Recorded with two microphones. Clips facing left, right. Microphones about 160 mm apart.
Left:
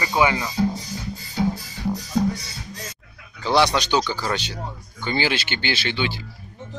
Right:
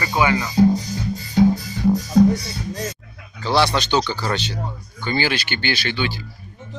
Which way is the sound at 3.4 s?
15° left (ahead or behind).